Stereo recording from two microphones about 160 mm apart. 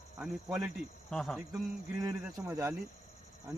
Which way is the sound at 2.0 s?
15° right (ahead or behind).